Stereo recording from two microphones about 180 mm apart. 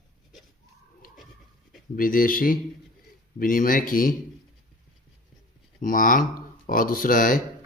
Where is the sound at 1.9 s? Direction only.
50° left (ahead or behind).